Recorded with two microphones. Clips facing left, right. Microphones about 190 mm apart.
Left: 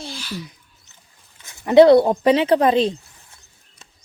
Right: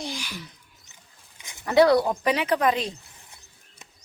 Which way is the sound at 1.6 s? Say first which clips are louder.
Left 8 dB; 25° left (ahead or behind).